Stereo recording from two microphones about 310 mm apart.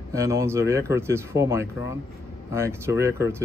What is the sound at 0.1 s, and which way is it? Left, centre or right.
Speech, centre.